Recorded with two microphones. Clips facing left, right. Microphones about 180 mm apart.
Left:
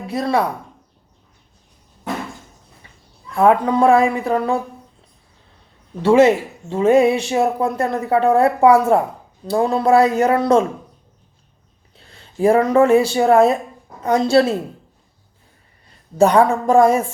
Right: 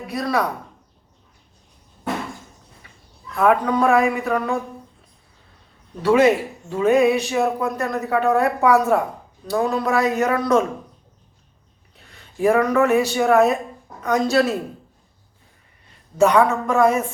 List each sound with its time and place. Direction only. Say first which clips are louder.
0.1 s speech: left 3 dB; 25° left (ahead or behind)
3.3 s speech: left 3 dB; 25° left (ahead or behind)
6.0 s speech: left 3 dB; 25° left (ahead or behind)
11.9 s a woman's voice: left 4 dB; 30° left (ahead or behind)
16.1 s a woman's voice: left 2 dB; 35° left (ahead or behind)